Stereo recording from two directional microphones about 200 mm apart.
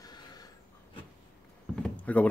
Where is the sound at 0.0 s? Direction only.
20° left (ahead or behind).